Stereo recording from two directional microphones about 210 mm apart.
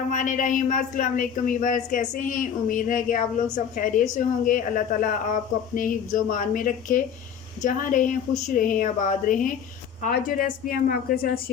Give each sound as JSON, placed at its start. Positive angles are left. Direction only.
{"t": 0.1, "sound": "a woman's voice", "side_deg": 35}